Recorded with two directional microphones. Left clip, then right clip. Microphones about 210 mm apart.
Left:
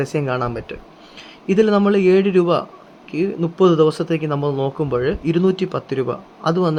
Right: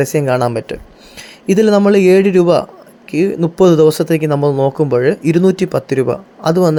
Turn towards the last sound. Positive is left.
turn(degrees=-15)  # may be behind; listen again after turning